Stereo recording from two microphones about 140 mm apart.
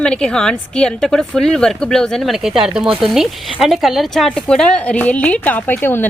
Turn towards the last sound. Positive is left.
turn(degrees=15)  # may be behind; listen again after turning